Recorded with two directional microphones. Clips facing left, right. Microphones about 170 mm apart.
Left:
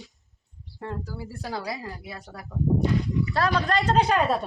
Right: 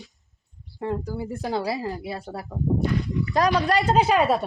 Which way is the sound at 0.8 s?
15° right (ahead or behind).